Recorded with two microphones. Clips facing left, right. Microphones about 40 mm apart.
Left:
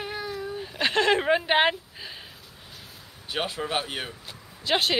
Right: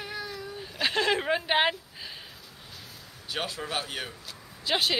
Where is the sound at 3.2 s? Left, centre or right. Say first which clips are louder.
Left 4 dB; left.